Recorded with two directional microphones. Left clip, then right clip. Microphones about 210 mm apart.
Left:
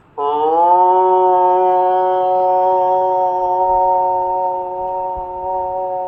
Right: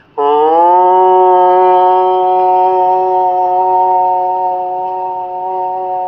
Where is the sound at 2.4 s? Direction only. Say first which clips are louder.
Right 4 dB; 30° right (ahead or behind).